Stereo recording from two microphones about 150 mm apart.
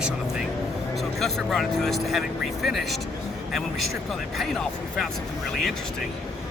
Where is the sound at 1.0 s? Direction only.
Centre (ahead or behind).